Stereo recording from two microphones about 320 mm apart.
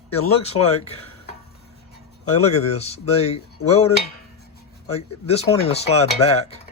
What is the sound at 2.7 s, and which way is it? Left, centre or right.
Speech, centre.